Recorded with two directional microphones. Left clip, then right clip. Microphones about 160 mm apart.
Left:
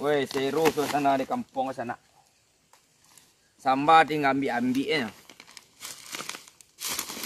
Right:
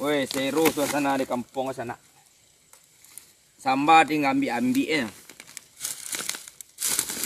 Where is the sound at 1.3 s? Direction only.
15° left (ahead or behind).